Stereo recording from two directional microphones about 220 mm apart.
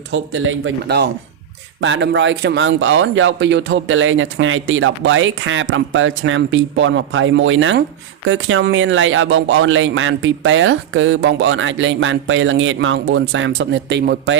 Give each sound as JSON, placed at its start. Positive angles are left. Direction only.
{"t": 0.1, "sound": "speech", "side_deg": -60}